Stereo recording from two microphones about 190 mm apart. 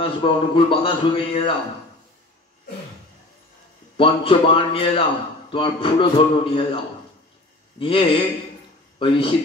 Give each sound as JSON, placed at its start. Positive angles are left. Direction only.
{"t": 0.0, "sound": "a man's voice", "side_deg": 30}
{"t": 3.9, "sound": "a man's voice", "side_deg": 30}
{"t": 7.8, "sound": "a man's voice", "side_deg": 25}